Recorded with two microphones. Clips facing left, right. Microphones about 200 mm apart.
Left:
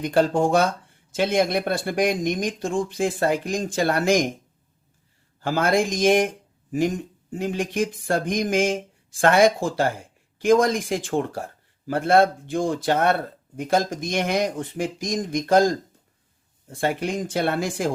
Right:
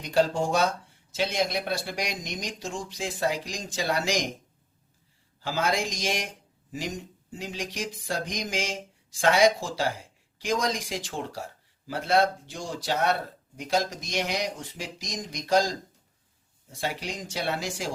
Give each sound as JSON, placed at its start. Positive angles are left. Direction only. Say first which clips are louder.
{"t": 0.0, "sound": "speech", "louder": "left 5 dB", "side_deg": 55}
{"t": 5.4, "sound": "speech", "louder": "left 7 dB", "side_deg": 55}